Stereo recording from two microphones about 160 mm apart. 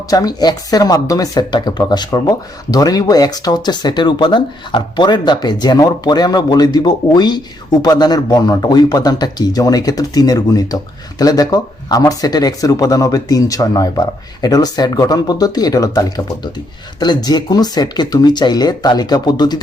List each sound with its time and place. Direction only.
0.1 s speech: 25° left (ahead or behind)